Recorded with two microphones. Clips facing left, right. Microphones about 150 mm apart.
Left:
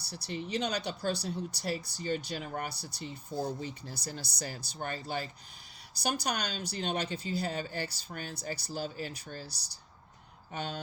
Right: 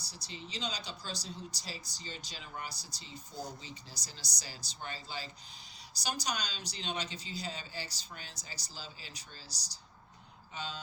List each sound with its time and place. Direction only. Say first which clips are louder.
0.0 s speech: left 9 dB; 60° left (ahead or behind)